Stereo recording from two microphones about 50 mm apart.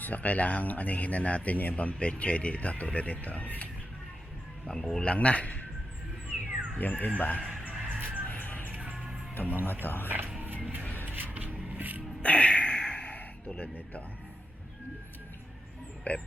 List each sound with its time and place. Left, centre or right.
0.0 s speech: left
4.6 s speech: centre
5.0 s speech: left
6.2 s squawk: left
6.7 s speech: left
7.6 s music: right
8.2 s music: left
8.6 s music: right
9.3 s speech: left
11.0 s a sound: right
11.7 s music: right
12.2 s a sound: left
13.1 s speech: left
16.1 s speech: left